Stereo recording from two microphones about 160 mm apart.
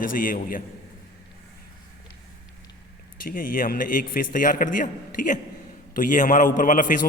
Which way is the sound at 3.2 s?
60° left (ahead or behind).